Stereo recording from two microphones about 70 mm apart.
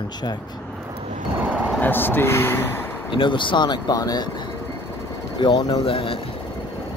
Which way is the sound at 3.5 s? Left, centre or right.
Left.